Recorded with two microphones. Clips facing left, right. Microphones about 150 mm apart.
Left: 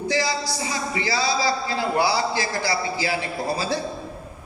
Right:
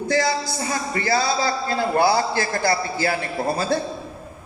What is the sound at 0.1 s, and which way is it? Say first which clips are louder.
A man's voice: right 4 dB; 50° right (ahead or behind).